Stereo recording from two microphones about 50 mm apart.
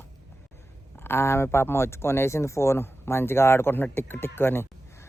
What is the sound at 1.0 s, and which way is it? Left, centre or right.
Speech, left.